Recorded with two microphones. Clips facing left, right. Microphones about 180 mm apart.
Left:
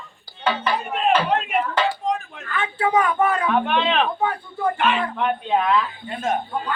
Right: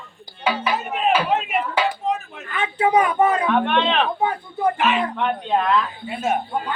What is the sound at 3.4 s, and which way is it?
Music, centre (ahead or behind).